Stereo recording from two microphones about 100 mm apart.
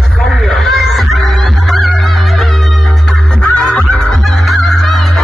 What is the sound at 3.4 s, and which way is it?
Fowl, 10° left (ahead or behind).